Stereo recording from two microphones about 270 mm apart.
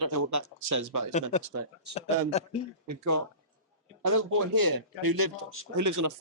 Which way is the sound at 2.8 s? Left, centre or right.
Right.